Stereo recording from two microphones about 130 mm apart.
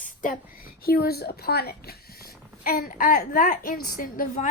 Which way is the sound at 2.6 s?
90° left.